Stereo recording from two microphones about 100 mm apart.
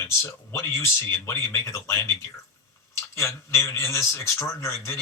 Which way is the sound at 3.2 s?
25° left (ahead or behind).